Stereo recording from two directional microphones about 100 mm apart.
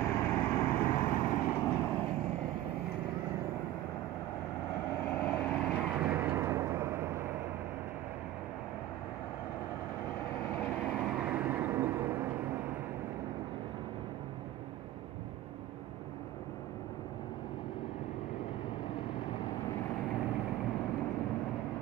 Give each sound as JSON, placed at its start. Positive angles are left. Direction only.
{"t": 0.0, "sound": "vehicle", "side_deg": 15}
{"t": 5.0, "sound": "vehicle", "side_deg": 15}
{"t": 5.9, "sound": "vehicle", "side_deg": -15}
{"t": 10.4, "sound": "vehicle", "side_deg": 15}
{"t": 11.0, "sound": "vehicle", "side_deg": -10}